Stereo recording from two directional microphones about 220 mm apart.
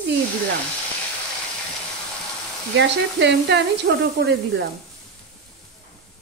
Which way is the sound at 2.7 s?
55° right (ahead or behind).